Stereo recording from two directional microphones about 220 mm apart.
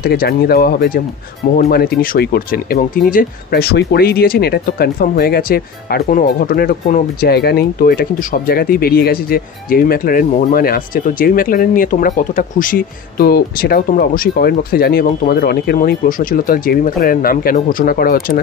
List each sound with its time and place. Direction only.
0.0 s speech: 45° left (ahead or behind)